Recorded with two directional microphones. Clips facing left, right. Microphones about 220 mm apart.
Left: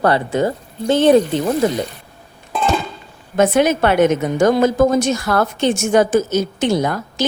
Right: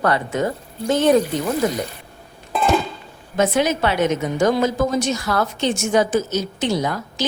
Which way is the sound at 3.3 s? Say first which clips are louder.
Left 4 dB; 55° left (ahead or behind).